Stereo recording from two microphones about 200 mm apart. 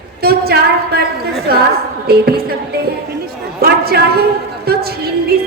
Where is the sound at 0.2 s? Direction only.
50° right (ahead or behind).